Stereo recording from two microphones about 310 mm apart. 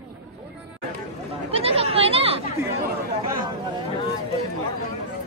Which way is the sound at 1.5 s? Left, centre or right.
Centre.